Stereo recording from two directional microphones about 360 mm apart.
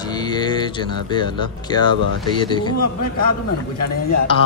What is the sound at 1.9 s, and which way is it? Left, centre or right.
Speech, right.